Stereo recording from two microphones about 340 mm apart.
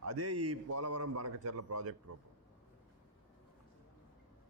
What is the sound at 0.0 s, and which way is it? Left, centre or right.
A man's voice, right.